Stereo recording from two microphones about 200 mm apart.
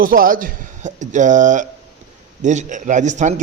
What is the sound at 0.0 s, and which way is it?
Speech, 45° right (ahead or behind).